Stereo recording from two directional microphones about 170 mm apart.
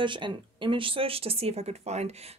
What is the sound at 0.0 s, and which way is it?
Speech, 30° right (ahead or behind).